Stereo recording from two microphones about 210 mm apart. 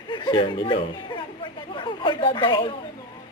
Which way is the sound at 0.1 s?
25° left (ahead or behind).